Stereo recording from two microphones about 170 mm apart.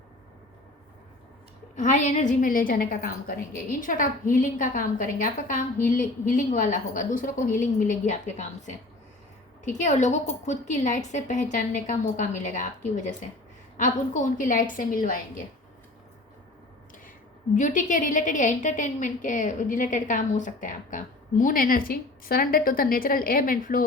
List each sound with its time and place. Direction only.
1.7 s a woman's voice: 45° left (ahead or behind)
17.5 s a woman's voice: 45° left (ahead or behind)